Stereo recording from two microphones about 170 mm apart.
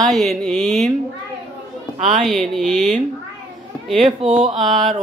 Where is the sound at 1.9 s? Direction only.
45° right (ahead or behind).